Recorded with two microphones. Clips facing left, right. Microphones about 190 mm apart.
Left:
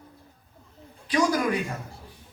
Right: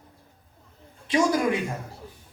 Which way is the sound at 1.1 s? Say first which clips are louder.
Right 1 dB; 25° right (ahead or behind).